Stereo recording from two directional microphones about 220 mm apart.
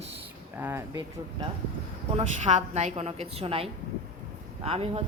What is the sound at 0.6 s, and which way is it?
Speech, 10° right (ahead or behind).